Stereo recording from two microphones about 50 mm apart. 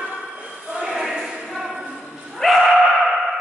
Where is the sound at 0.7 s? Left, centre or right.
Centre.